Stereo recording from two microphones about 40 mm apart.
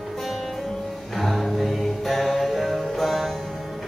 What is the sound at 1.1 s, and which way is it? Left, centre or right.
Music, centre.